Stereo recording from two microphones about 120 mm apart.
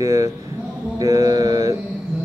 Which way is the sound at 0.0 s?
25° right (ahead or behind).